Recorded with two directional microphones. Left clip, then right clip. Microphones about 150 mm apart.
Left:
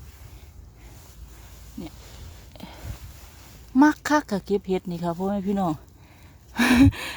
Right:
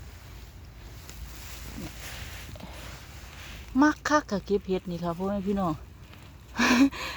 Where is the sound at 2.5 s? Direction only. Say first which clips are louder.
Left 2 dB; 65° left (ahead or behind).